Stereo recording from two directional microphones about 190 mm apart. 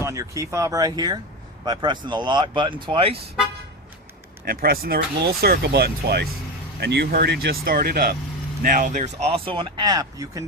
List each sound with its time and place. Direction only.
0.0 s speech: 15° right (ahead or behind)
4.4 s speech: 50° right (ahead or behind); by 10.4 s 20° right (ahead or behind)